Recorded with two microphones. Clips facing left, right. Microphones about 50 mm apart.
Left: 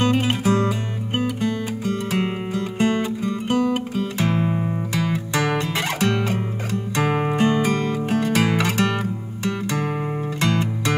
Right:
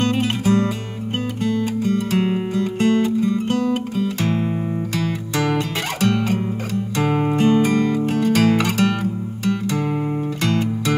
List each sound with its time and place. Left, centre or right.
0.0 s music: centre
0.4 s music: left
0.7 s music: centre